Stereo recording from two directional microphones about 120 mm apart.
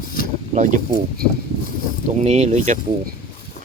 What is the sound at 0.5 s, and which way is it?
Speech, 90° right.